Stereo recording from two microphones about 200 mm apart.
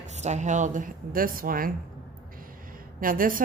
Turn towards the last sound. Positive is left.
turn(degrees=-45)  # may be behind; listen again after turning